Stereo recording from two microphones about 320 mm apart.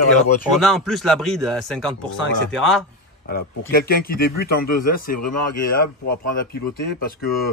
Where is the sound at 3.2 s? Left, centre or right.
Left.